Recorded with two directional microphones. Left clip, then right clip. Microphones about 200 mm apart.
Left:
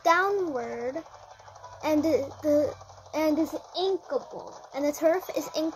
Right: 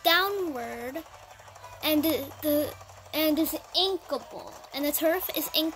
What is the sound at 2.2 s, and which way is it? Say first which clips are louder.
A child's voice: left 3 dB; 35° right (ahead or behind).